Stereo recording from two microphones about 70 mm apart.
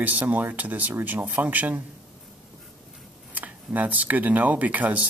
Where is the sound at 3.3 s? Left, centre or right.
Right.